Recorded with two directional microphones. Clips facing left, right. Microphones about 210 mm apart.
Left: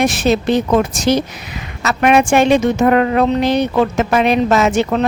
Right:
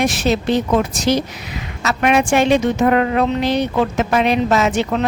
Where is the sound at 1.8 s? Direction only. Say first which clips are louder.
Left 3 dB; 50° left (ahead or behind).